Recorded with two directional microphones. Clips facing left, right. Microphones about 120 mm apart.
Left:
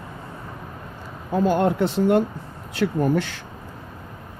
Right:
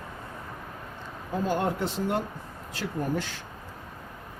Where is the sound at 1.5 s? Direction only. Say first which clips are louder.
Left 7 dB; 75° left (ahead or behind).